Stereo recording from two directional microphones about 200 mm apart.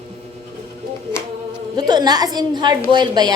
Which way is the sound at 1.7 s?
20° right (ahead or behind).